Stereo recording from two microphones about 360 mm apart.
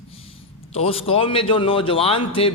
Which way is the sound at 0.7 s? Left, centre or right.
Centre.